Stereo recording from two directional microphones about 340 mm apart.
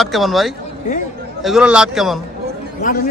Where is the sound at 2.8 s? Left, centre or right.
Left.